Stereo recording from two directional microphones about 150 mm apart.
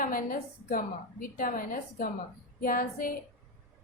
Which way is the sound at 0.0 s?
65° left (ahead or behind).